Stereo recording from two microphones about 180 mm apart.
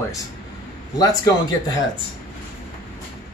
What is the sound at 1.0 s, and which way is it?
Speech, 20° left (ahead or behind).